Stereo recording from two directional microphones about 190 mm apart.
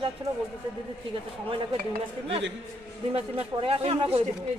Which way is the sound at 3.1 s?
30° right (ahead or behind).